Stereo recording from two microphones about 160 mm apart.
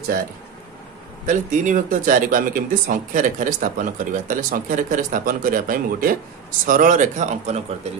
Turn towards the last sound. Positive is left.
turn(degrees=-45)  # may be behind; listen again after turning